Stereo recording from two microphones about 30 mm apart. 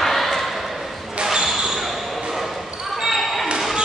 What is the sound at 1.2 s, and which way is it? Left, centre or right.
Basketball bounce, right.